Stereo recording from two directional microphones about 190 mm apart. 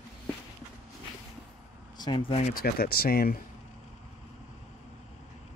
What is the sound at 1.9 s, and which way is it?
Speech, 25° left (ahead or behind).